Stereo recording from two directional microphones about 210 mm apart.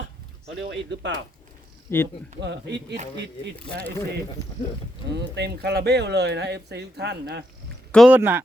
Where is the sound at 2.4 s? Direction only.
55° right (ahead or behind).